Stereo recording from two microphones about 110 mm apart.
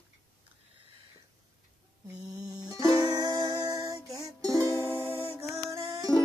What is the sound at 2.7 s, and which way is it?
Music, 35° right (ahead or behind).